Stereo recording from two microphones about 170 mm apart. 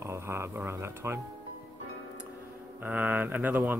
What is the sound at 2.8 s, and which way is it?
Speech, 10° right (ahead or behind).